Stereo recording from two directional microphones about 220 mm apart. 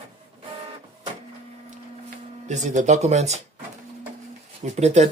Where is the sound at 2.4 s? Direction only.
35° right (ahead or behind).